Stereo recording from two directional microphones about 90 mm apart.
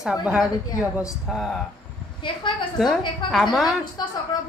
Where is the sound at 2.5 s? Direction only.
65° left (ahead or behind).